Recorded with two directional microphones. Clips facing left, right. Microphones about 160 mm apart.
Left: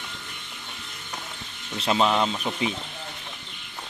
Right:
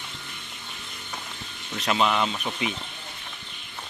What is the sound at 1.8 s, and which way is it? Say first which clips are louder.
Speech: left 2 dB; 30° left (ahead or behind).